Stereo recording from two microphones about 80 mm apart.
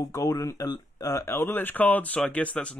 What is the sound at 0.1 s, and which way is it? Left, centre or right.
Speech, left.